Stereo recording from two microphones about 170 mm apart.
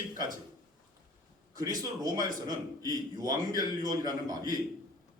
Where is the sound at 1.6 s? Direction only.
20° right (ahead or behind).